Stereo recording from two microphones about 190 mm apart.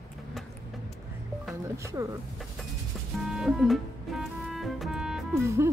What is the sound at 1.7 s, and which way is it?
Music, 15° right (ahead or behind).